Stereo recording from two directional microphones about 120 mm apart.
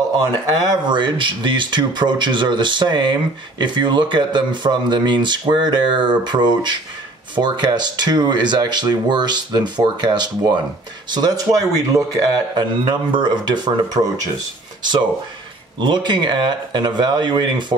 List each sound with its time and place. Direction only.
0.8 s speech: 40° right (ahead or behind)